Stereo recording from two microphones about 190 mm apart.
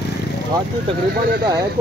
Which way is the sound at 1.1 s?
55° right (ahead or behind).